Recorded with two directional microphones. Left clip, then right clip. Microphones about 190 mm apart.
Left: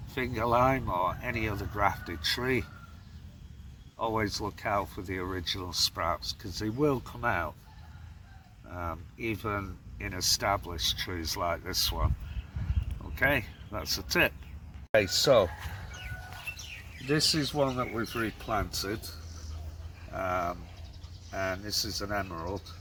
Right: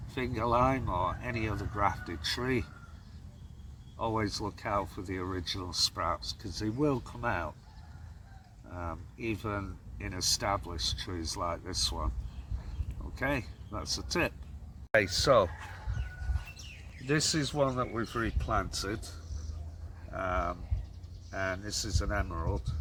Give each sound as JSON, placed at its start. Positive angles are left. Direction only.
{"t": 0.1, "sound": "speech", "side_deg": 10}
{"t": 0.6, "sound": "speech", "side_deg": 15}
{"t": 1.2, "sound": "speech", "side_deg": 0}
{"t": 1.6, "sound": "speech", "side_deg": 15}
{"t": 3.9, "sound": "speech", "side_deg": 0}
{"t": 8.7, "sound": "speech", "side_deg": 10}
{"t": 9.2, "sound": "speech", "side_deg": 0}
{"t": 13.1, "sound": "speech", "side_deg": 0}
{"t": 13.7, "sound": "speech", "side_deg": 15}
{"t": 14.9, "sound": "speech", "side_deg": 20}
{"t": 17.1, "sound": "speech", "side_deg": 0}